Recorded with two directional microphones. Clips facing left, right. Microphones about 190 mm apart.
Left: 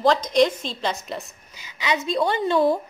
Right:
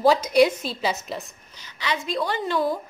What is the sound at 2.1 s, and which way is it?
Speech, 25° left (ahead or behind).